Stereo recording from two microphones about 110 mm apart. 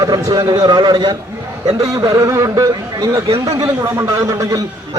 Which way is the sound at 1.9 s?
30° right (ahead or behind).